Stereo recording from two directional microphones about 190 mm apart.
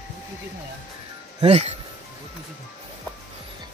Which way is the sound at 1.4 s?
35° right (ahead or behind).